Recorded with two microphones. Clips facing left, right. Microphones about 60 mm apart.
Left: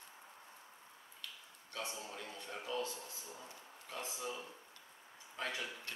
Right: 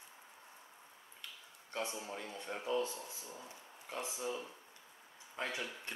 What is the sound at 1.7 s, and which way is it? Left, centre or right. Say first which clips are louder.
A man's voice: right 4 dB; right.